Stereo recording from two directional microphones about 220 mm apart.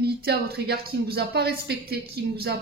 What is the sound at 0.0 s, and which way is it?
Speech, 45° right (ahead or behind).